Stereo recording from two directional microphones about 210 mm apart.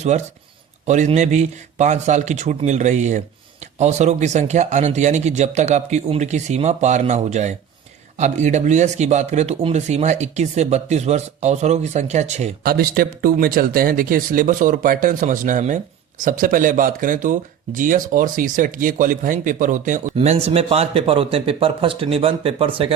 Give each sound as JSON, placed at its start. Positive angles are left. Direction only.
{"t": 0.1, "sound": "speech", "side_deg": -35}
{"t": 12.6, "sound": "speech", "side_deg": -45}